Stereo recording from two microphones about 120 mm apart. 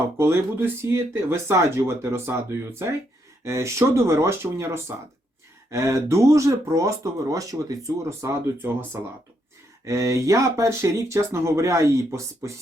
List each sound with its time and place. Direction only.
0.8 s speech: 20° right (ahead or behind)